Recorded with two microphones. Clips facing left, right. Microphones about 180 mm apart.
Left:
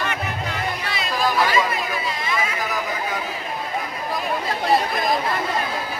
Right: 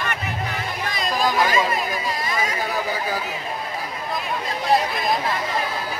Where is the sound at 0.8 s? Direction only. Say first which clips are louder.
Right 2 dB; 45° right (ahead or behind).